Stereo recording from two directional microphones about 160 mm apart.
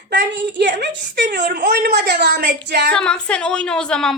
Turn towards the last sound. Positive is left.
turn(degrees=5)  # may be behind; listen again after turning